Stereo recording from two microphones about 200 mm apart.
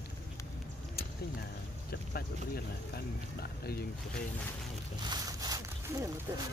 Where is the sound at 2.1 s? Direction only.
50° left (ahead or behind).